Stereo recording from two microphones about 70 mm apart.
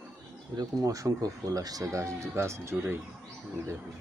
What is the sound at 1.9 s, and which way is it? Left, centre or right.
Speech, right.